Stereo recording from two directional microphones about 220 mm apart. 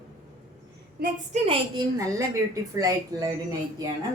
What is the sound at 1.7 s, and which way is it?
A woman's voice, 15° right (ahead or behind).